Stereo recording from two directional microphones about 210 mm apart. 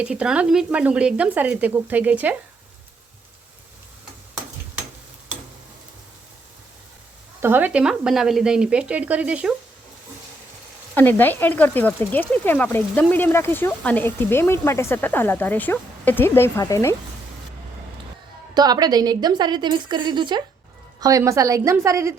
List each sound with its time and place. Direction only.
0.0 s speech: 5° right (ahead or behind)
7.4 s speech: 10° right (ahead or behind)
10.9 s speech: 10° left (ahead or behind)
18.5 s a woman's voice: 20° right (ahead or behind)